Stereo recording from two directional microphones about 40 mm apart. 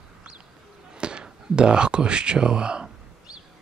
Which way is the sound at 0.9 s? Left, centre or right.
Right.